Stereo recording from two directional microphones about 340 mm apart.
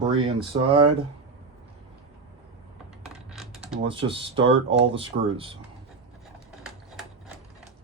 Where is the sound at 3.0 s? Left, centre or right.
Centre.